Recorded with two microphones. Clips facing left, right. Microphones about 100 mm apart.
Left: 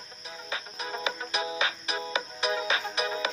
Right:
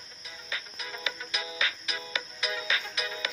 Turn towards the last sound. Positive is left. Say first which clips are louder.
# left 6 dB
turn(degrees=35)  # may be behind; listen again after turning